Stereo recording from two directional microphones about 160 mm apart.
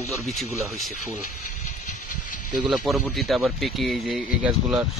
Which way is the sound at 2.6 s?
Centre (ahead or behind).